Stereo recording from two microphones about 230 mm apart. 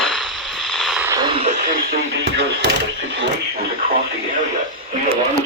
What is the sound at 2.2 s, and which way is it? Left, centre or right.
Music, right.